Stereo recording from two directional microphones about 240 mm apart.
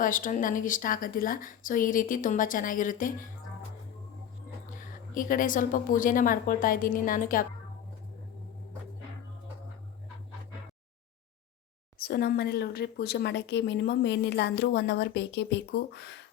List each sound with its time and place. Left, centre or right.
0.0 s a woman's voice: left
5.1 s a woman's voice: left
11.9 s speech: left